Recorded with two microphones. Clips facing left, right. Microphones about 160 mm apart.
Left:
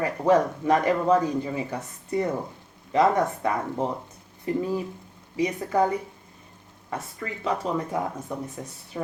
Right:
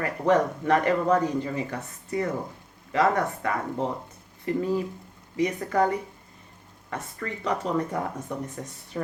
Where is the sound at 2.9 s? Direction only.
15° left (ahead or behind).